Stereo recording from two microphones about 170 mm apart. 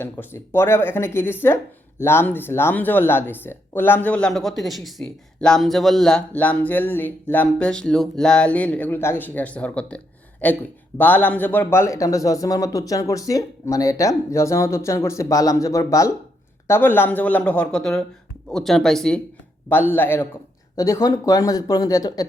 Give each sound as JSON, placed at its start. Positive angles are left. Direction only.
{"t": 0.0, "sound": "a man's voice", "side_deg": 15}